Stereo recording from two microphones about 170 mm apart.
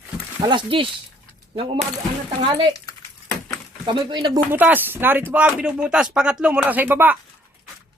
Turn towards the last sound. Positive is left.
turn(degrees=-10)  # may be behind; listen again after turning